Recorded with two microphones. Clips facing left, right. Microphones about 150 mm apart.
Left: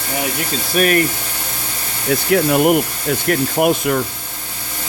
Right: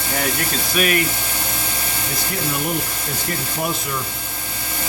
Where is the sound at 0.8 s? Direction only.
40° left (ahead or behind).